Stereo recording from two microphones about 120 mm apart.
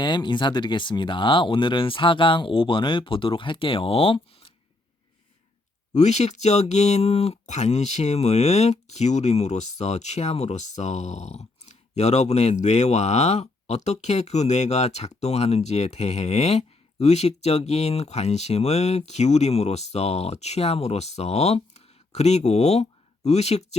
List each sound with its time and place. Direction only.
0.0 s speech: 40° left (ahead or behind)
5.9 s speech: 70° left (ahead or behind)